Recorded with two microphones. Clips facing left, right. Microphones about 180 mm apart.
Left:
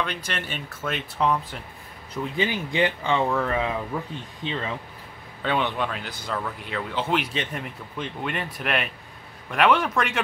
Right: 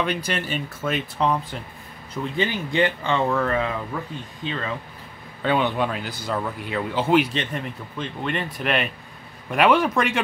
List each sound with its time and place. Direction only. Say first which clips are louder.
0.0 s speech: right 5 dB; 5° right (ahead or behind)
2.3 s speech: right 2 dB; 10° left (ahead or behind)
5.4 s speech: right 4 dB; 5° right (ahead or behind)
7.3 s speech: right 2 dB; 5° left (ahead or behind)